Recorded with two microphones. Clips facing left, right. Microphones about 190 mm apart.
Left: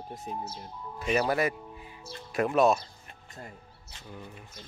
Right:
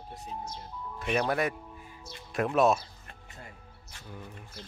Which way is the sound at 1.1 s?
5° left (ahead or behind).